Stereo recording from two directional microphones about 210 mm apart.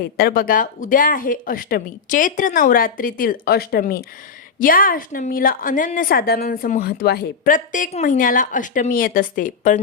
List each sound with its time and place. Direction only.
0.2 s a woman's voice: 45° left (ahead or behind)